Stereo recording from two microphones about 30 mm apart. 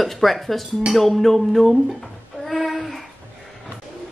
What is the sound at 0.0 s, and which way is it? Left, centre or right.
Speech, centre.